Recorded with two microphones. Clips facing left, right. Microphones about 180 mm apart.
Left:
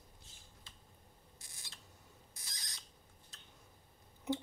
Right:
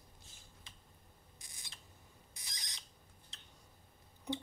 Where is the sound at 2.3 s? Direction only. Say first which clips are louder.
Right 2 dB; 15° right (ahead or behind).